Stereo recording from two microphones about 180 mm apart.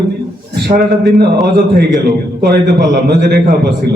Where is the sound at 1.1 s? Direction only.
60° right (ahead or behind).